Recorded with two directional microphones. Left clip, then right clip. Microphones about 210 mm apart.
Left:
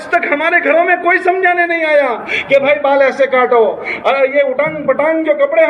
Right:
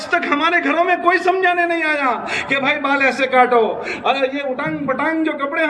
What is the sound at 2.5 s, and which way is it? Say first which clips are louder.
A man's voice: left 7 dB; 15° right (ahead or behind).